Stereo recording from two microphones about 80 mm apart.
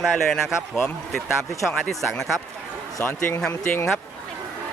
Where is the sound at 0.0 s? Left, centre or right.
Centre.